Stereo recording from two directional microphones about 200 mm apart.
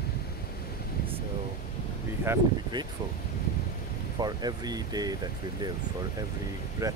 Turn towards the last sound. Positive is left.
turn(degrees=-15)  # may be behind; listen again after turning